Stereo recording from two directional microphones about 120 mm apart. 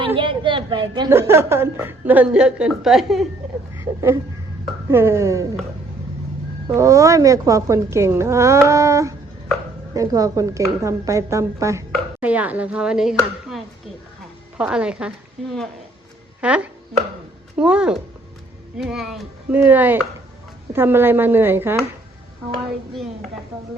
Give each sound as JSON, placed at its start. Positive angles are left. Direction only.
{"t": 0.0, "sound": "a sound", "side_deg": -45}
{"t": 1.1, "sound": "a woman's voice", "side_deg": -20}
{"t": 3.8, "sound": "a sound", "side_deg": -20}
{"t": 4.9, "sound": "a woman's voice", "side_deg": -20}
{"t": 6.7, "sound": "a woman's voice", "side_deg": -25}
{"t": 12.2, "sound": "a woman's voice", "side_deg": -10}
{"t": 14.6, "sound": "a woman's voice", "side_deg": -10}
{"t": 19.6, "sound": "a woman's voice", "side_deg": -15}